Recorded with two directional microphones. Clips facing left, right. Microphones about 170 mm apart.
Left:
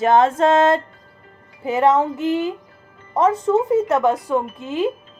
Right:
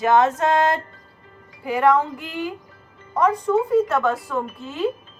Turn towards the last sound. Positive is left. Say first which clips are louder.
# left 3 dB
turn(degrees=20)  # may be behind; listen again after turning